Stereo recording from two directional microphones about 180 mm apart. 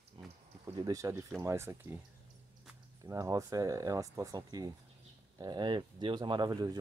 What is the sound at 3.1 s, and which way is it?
Speech, 20° right (ahead or behind).